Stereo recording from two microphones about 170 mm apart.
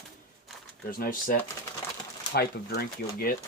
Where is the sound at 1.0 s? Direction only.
55° left (ahead or behind).